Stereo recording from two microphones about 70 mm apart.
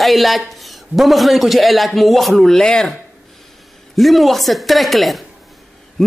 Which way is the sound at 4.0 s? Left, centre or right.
Centre.